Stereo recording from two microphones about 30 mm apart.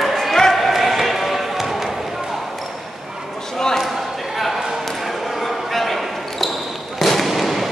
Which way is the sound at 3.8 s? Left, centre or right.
Centre.